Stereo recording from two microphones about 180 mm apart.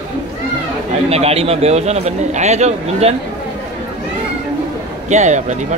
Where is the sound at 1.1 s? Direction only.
35° right (ahead or behind).